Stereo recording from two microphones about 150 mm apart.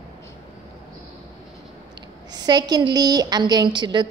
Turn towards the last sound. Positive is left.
turn(degrees=-30)  # may be behind; listen again after turning